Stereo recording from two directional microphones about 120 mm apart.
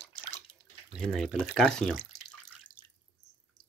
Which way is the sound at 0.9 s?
Centre (ahead or behind).